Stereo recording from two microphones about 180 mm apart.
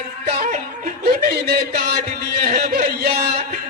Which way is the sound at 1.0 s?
55° right (ahead or behind).